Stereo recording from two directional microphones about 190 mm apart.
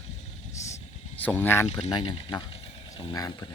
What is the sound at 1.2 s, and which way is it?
Speech, 10° left (ahead or behind).